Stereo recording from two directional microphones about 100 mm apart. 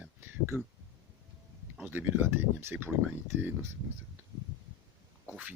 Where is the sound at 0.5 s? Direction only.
25° right (ahead or behind).